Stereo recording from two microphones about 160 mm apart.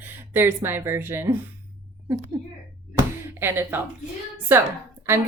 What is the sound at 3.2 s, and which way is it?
Speech, 15° right (ahead or behind).